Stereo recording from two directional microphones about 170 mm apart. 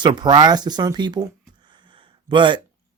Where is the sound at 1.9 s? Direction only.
30° right (ahead or behind).